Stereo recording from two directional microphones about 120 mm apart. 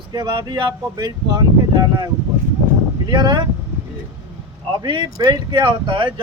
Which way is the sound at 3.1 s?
40° right (ahead or behind).